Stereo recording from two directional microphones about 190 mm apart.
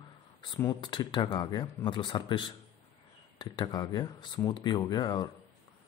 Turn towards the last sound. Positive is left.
turn(degrees=20)  # may be behind; listen again after turning